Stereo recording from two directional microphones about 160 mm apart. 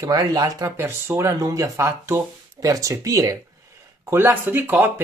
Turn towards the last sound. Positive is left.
turn(degrees=-15)  # may be behind; listen again after turning